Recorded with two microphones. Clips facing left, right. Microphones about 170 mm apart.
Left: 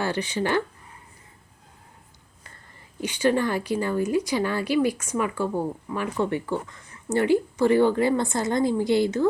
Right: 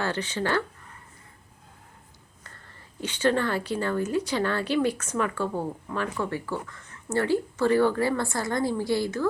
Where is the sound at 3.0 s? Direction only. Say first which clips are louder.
Left 2 dB; 10° left (ahead or behind).